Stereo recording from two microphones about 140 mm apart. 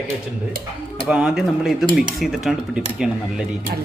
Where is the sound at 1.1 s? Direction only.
5° right (ahead or behind).